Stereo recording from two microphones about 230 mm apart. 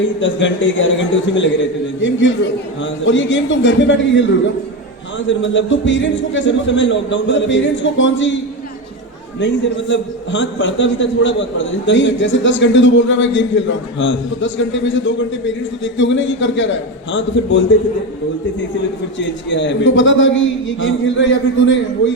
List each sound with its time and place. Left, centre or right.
0.0 s a man's voice: left
5.3 s a man's voice: left
9.9 s a man's voice: left
19.2 s a man's voice: left